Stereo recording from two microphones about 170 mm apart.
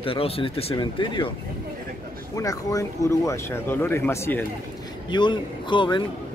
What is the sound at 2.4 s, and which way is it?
Speech, 20° left (ahead or behind).